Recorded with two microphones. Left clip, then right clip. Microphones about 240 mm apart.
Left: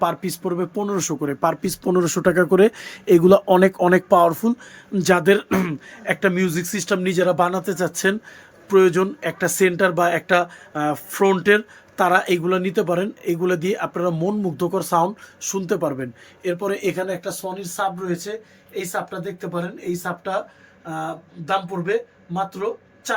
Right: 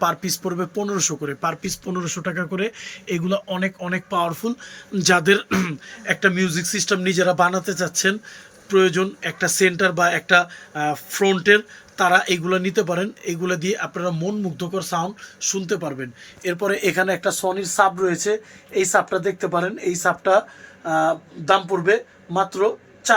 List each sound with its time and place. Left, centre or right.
0.0 s speech: centre
17.1 s speech: centre
21.4 s speech: centre